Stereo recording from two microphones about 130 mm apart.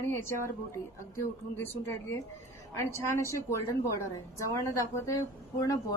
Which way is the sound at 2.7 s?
20° left (ahead or behind).